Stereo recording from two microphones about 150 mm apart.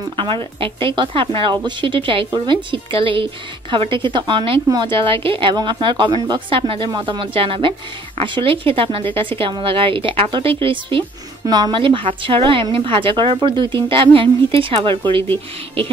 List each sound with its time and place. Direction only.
0.1 s speech: 35° right (ahead or behind)